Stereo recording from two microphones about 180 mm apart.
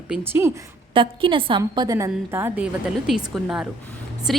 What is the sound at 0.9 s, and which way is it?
A woman's voice, 30° right (ahead or behind).